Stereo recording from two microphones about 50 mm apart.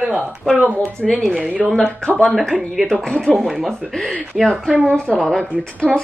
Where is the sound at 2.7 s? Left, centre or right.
Centre.